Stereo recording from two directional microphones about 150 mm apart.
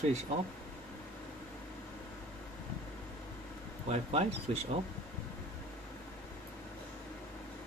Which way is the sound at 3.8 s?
45° right (ahead or behind).